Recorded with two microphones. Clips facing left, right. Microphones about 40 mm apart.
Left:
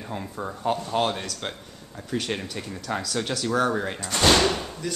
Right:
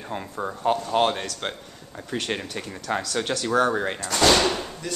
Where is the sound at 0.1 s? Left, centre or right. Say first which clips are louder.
Right 3 dB; centre.